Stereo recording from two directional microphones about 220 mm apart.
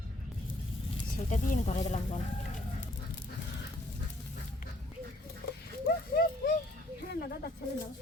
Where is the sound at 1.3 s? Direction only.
35° left (ahead or behind).